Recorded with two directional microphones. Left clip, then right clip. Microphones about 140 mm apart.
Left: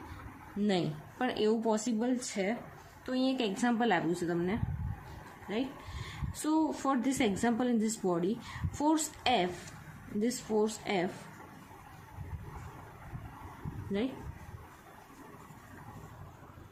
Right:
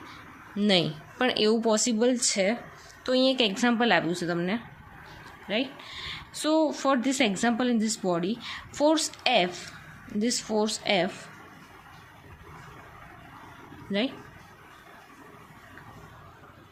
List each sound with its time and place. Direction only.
0.6 s speech: 25° right (ahead or behind)
13.9 s speech: 20° right (ahead or behind)